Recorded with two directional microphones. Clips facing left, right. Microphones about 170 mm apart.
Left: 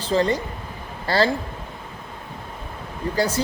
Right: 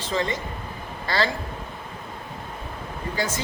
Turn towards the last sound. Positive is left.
turn(degrees=35)  # may be behind; listen again after turning